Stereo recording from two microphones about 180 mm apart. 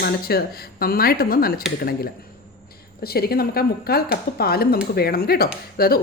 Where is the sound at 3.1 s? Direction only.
60° left (ahead or behind).